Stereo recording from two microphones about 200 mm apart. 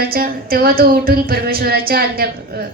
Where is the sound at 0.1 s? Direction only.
45° right (ahead or behind).